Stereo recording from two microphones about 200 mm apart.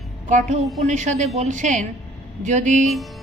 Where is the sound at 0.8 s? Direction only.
35° right (ahead or behind).